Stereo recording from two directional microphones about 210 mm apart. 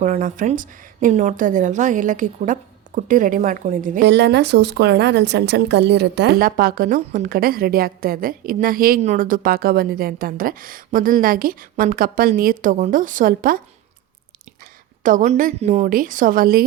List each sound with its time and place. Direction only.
0.0 s a woman's voice: 35° right (ahead or behind)
4.1 s a woman's voice: 55° right (ahead or behind)
15.0 s a woman's voice: 35° right (ahead or behind)